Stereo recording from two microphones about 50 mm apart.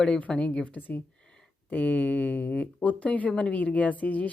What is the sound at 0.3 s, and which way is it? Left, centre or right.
Speech, left.